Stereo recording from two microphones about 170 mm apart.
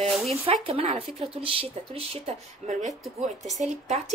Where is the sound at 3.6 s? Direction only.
40° right (ahead or behind).